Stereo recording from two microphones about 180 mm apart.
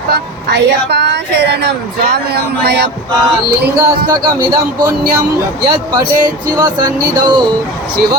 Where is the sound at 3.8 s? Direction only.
20° right (ahead or behind).